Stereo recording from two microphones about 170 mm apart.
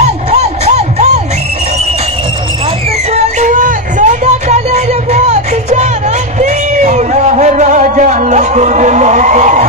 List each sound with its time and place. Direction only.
0.3 s crowd: 40° right (ahead or behind)
3.1 s music: 45° right (ahead or behind)